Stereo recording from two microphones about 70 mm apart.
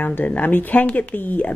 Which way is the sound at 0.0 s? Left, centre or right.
Left.